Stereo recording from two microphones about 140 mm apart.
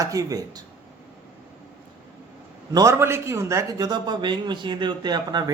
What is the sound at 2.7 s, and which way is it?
A man's voice, 25° right (ahead or behind).